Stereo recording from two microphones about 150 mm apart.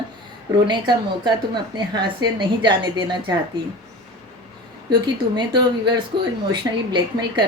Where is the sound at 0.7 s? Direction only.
30° right (ahead or behind).